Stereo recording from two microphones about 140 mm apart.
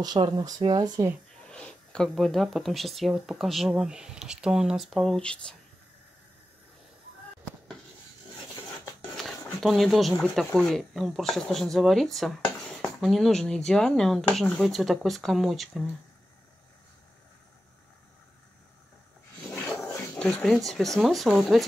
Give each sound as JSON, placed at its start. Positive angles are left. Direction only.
{"t": 0.0, "sound": "speech", "side_deg": -30}
{"t": 1.5, "sound": "speech", "side_deg": 5}
{"t": 9.6, "sound": "speech", "side_deg": 0}
{"t": 20.2, "sound": "speech", "side_deg": 5}